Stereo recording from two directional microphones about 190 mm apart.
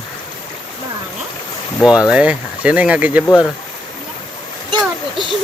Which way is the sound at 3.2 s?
15° left (ahead or behind).